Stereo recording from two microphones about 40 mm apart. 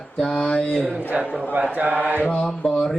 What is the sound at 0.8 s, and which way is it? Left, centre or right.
A man's voice, right.